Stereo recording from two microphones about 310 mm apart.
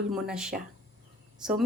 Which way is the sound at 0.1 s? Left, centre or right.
Centre.